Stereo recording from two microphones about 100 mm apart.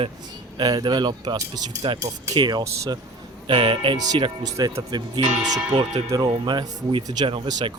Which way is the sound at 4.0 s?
40° right (ahead or behind).